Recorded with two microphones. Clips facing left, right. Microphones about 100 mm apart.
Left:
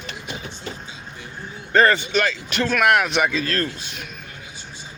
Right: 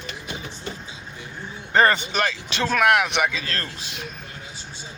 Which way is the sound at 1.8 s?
20° right (ahead or behind).